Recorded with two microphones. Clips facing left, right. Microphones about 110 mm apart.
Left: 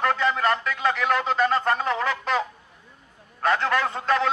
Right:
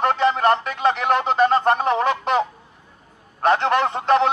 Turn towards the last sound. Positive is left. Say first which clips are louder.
# right 5 dB
turn(degrees=-20)  # may be behind; listen again after turning